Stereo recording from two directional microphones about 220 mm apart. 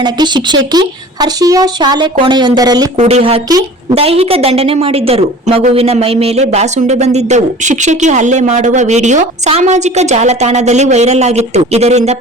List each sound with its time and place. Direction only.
0.0 s a woman's voice: 20° right (ahead or behind)